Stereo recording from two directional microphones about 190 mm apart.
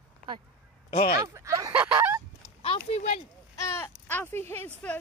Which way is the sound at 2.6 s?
30° left (ahead or behind).